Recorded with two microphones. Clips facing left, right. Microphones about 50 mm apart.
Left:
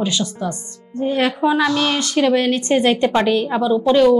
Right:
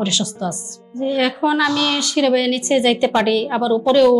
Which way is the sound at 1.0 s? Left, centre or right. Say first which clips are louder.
Even; left.